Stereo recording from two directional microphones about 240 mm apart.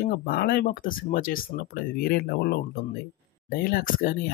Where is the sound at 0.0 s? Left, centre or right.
Left.